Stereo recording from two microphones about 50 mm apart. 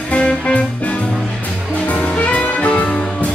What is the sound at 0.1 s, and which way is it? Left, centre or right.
Music, left.